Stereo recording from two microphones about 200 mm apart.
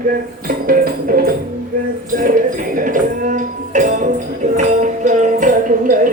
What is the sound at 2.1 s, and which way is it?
Speech, 40° right (ahead or behind).